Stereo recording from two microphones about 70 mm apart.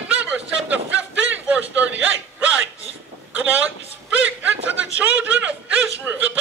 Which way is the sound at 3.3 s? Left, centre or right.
Right.